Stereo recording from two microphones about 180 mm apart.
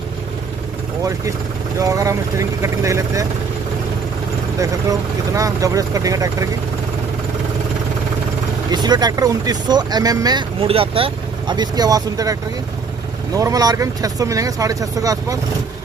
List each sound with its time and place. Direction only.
1.8 s speech: 20° right (ahead or behind)
5.3 s speech: 20° right (ahead or behind)
8.7 s speech: 25° right (ahead or behind)